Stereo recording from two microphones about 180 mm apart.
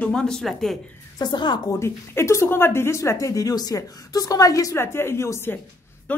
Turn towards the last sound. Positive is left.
turn(degrees=15)  # may be behind; listen again after turning